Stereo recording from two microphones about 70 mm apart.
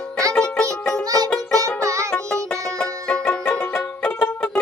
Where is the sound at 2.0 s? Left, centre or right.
Centre.